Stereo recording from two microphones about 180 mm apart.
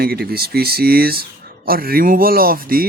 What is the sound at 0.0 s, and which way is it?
Speech, 60° right (ahead or behind).